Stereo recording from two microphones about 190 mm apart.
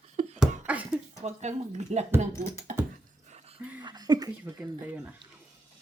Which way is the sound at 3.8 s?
20° right (ahead or behind).